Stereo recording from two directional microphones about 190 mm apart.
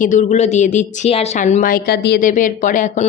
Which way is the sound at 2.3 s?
40° left (ahead or behind).